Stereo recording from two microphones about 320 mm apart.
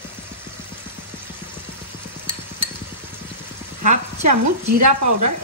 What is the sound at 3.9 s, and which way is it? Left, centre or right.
Speech, right.